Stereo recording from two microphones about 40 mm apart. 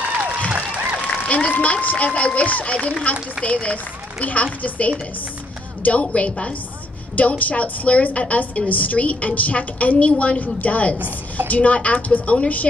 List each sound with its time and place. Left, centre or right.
0.1 s a sound: right
0.6 s applause: left
1.6 s a woman's voice: left
3.4 s speech: centre
3.7 s a woman's voice: left